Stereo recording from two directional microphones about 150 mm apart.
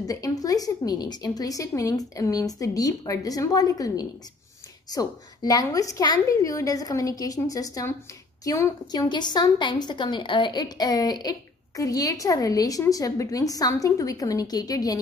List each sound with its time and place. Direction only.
0.0 s a woman's voice: 25° left (ahead or behind)